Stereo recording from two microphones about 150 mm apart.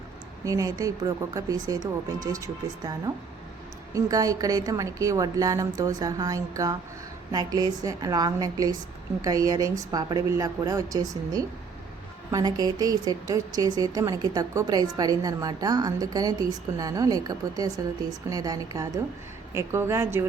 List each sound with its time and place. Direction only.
0.4 s speech: 20° right (ahead or behind)
3.9 s a woman's voice: 25° right (ahead or behind)